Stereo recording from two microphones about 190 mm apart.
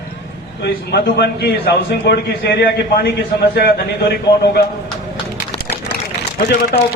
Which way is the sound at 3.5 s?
55° left (ahead or behind).